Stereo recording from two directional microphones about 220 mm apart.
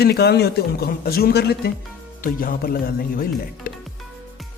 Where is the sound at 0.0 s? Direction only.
50° left (ahead or behind).